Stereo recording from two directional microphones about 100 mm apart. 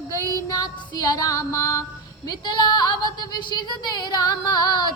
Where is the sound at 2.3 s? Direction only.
45° left (ahead or behind).